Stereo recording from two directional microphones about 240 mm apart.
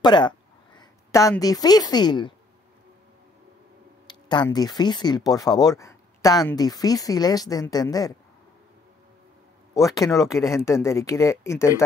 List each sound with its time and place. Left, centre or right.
0.0 s speech: centre
4.1 s speech: centre
9.8 s speech: centre